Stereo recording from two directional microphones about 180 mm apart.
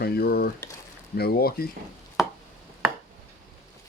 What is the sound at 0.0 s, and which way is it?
Speech, 60° left (ahead or behind).